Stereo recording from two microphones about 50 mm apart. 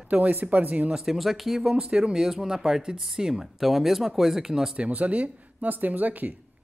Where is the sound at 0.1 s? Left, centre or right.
Right.